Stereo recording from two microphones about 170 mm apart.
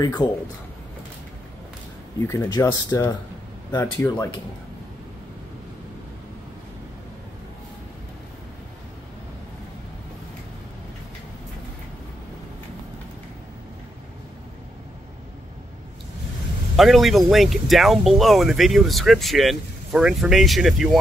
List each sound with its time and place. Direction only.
0.2 s speech: 25° left (ahead or behind)
2.2 s speech: 20° left (ahead or behind)
16.7 s speech: centre (ahead or behind)